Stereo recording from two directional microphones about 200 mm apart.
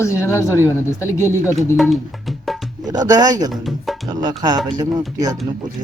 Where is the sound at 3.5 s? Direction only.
Centre (ahead or behind).